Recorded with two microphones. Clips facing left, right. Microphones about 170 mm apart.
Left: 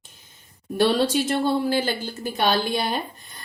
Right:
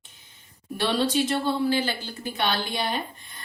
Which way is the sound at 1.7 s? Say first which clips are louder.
Left 2 dB; 45° left (ahead or behind).